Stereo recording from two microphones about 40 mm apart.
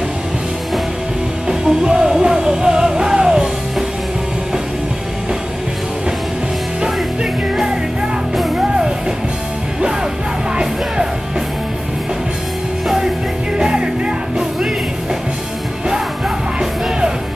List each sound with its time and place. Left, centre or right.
1.5 s music: centre
8.4 s music: centre
10.5 s music: centre
12.8 s music: centre
13.6 s music: centre